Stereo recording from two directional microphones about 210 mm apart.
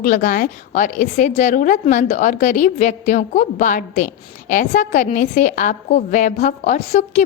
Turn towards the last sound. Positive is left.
turn(degrees=35)  # may be behind; listen again after turning